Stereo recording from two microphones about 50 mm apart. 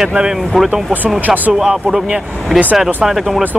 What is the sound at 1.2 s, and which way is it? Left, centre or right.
Speech, right.